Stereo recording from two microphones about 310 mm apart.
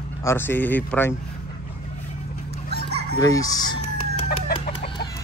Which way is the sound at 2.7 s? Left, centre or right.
Right.